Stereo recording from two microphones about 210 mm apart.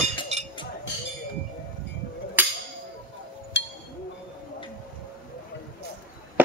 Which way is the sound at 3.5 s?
55° left (ahead or behind).